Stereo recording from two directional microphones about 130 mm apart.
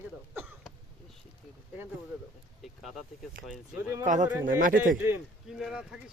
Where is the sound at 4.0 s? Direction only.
75° right (ahead or behind).